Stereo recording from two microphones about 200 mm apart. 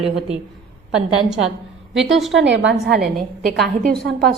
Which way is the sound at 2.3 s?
65° right (ahead or behind).